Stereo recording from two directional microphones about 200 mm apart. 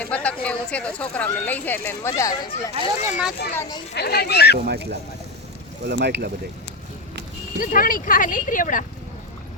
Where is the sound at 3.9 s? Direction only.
55° left (ahead or behind).